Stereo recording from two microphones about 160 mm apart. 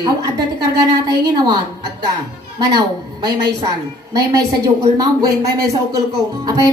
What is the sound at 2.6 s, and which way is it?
Speech, 25° right (ahead or behind).